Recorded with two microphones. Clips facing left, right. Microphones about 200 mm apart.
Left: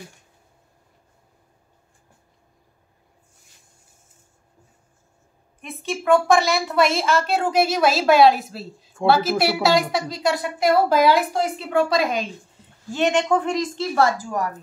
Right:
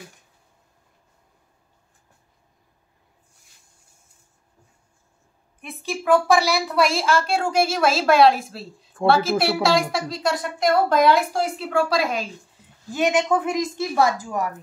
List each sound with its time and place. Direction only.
5.6 s a woman's voice: centre (ahead or behind)